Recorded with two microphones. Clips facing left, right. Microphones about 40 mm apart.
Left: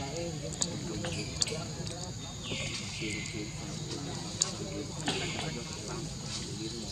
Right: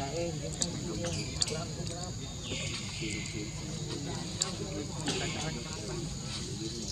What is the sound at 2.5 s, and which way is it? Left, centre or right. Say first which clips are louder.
Speech: left 1 dB; centre.